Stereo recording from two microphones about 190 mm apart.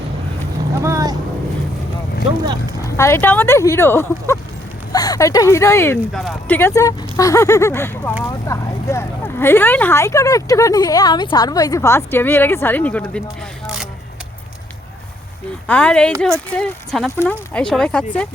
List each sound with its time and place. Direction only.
0.8 s vehicle: 15° right (ahead or behind)
2.8 s speech: 15° left (ahead or behind)
15.6 s speech: 5° left (ahead or behind)